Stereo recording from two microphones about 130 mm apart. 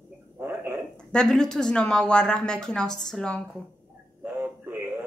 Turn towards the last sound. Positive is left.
turn(degrees=-15)  # may be behind; listen again after turning